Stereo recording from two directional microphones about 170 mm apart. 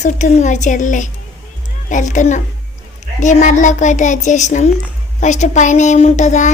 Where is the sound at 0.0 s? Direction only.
45° left (ahead or behind).